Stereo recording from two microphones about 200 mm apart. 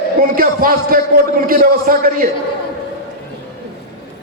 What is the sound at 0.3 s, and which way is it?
A man's voice, 45° right (ahead or behind).